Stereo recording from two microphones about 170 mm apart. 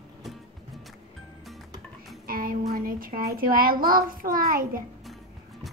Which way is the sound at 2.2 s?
55° right (ahead or behind).